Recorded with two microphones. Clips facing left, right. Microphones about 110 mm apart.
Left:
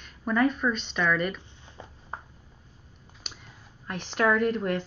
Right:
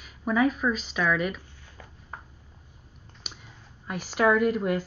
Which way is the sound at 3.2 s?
5° right (ahead or behind).